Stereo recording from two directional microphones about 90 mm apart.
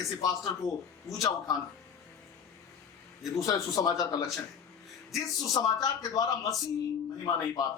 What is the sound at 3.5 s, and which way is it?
Speech, 45° left (ahead or behind).